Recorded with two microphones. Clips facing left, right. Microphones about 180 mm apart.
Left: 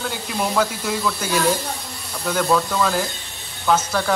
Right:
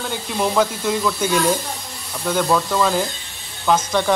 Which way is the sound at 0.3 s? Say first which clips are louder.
Right 3 dB; centre (ahead or behind).